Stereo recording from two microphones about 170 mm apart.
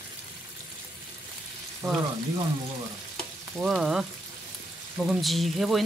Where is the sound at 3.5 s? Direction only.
5° right (ahead or behind).